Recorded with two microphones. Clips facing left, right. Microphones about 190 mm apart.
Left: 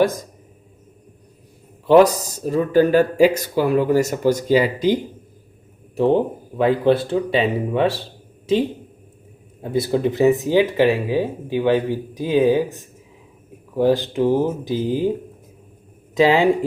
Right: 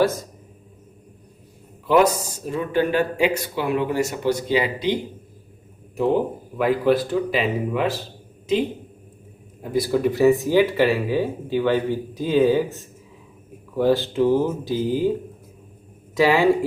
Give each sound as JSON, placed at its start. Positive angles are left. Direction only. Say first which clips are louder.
{"t": 0.0, "sound": "speech", "louder": "left 2 dB", "side_deg": 15}
{"t": 1.9, "sound": "speech", "louder": "left 5 dB", "side_deg": 35}
{"t": 6.0, "sound": "speech", "louder": "left 3 dB", "side_deg": 25}
{"t": 9.6, "sound": "speech", "louder": "left 1 dB", "side_deg": 25}
{"t": 16.1, "sound": "speech", "louder": "left 2 dB", "side_deg": 20}